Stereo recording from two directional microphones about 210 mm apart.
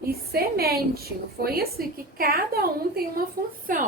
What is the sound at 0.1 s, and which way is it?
A woman's voice, 45° right (ahead or behind).